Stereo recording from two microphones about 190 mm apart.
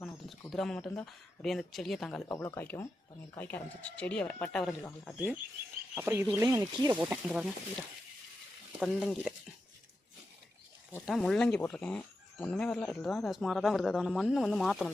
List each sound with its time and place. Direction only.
0.5 s speech: centre (ahead or behind)
5.9 s speech: 10° right (ahead or behind)
7.0 s speech: 10° right (ahead or behind)
8.8 s speech: centre (ahead or behind)
11.0 s speech: centre (ahead or behind)